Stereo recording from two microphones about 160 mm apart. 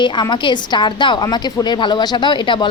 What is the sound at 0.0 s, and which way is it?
A woman's voice, 30° left (ahead or behind).